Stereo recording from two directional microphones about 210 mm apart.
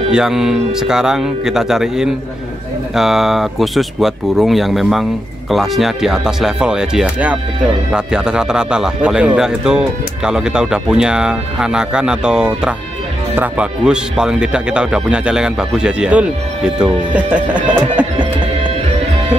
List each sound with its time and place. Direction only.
0.1 s a man's voice: 5° right (ahead or behind)
18.0 s music: 5° right (ahead or behind)